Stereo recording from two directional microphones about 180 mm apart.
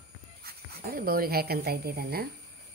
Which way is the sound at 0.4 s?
55° right (ahead or behind).